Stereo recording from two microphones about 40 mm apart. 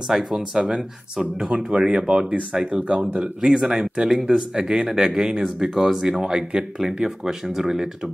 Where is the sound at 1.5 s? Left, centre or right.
Right.